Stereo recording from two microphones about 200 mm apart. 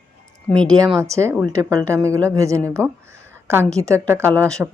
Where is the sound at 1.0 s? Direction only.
15° right (ahead or behind).